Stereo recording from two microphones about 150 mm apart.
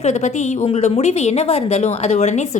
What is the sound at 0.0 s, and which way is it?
A woman's voice, 50° left (ahead or behind).